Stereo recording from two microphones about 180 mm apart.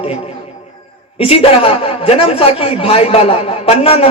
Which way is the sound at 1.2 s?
30° left (ahead or behind).